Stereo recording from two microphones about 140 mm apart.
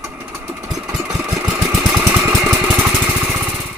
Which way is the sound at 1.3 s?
10° right (ahead or behind).